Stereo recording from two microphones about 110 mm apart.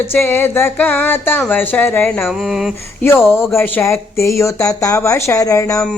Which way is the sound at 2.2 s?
Centre (ahead or behind).